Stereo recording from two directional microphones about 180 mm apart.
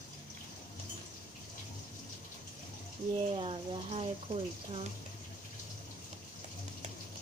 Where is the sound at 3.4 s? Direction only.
30° right (ahead or behind).